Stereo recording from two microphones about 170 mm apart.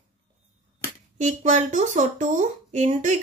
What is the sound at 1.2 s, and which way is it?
Speech, 45° right (ahead or behind).